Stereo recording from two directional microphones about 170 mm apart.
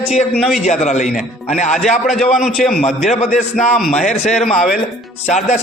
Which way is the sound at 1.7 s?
Centre (ahead or behind).